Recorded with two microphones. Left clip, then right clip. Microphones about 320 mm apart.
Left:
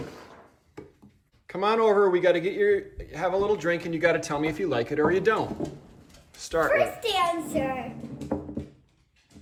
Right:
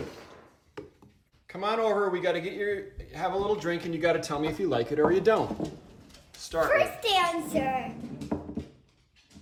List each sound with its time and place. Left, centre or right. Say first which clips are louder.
1.5 s a man's voice: left 5 dB; centre